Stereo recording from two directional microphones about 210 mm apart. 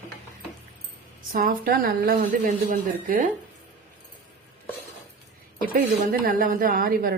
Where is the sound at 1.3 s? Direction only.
45° right (ahead or behind).